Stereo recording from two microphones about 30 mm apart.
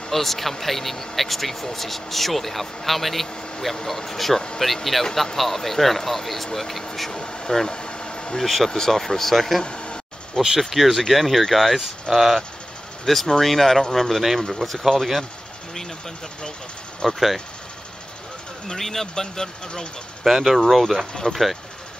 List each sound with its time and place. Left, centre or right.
0.1 s speech: centre
3.7 s speech: centre
7.7 s vehicle: left
8.4 s speech: centre
9.6 s speech: left
10.6 s speech: centre
13.0 s speech: centre
17.1 s speech: centre
18.8 s speech: centre
20.2 s speech: centre
20.6 s speech: centre